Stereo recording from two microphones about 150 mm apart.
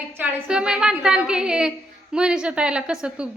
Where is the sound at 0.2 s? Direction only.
5° right (ahead or behind).